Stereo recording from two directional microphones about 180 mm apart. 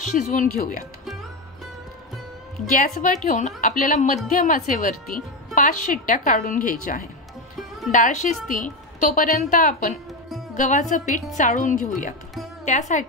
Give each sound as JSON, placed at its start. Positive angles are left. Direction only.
{"t": 0.1, "sound": "a woman's voice", "side_deg": 50}
{"t": 2.8, "sound": "a woman's voice", "side_deg": 45}